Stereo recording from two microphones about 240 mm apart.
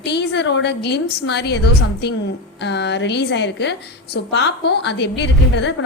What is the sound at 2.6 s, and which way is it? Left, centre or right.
A woman's voice, left.